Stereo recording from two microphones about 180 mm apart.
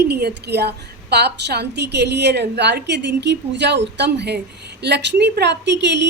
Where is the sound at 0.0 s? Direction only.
65° right (ahead or behind).